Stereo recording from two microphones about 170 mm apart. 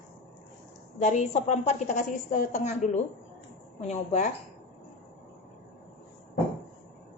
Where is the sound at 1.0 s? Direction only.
45° left (ahead or behind).